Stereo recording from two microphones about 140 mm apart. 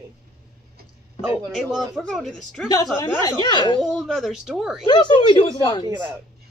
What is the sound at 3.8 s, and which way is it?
Speech, centre (ahead or behind).